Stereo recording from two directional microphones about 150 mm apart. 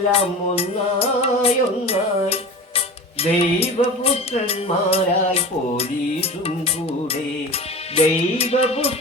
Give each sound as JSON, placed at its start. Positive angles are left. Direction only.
{"t": 0.1, "sound": "music", "side_deg": 40}
{"t": 7.9, "sound": "music", "side_deg": 40}